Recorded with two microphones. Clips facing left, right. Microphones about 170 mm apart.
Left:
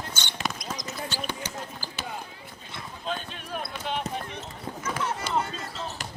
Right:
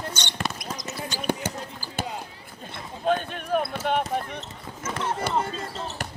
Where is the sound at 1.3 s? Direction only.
50° right (ahead or behind).